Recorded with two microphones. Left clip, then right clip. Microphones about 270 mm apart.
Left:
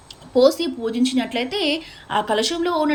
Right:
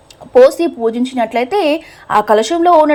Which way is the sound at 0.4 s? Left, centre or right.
Centre.